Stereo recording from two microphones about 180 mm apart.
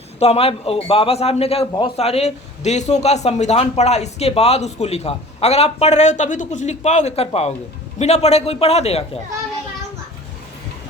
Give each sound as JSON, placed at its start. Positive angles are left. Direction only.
{"t": 0.2, "sound": "a man's voice", "side_deg": 35}